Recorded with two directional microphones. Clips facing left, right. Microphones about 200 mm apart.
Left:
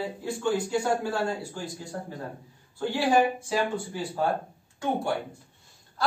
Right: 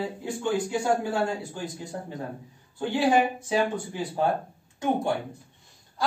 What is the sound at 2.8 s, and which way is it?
Speech, 20° right (ahead or behind).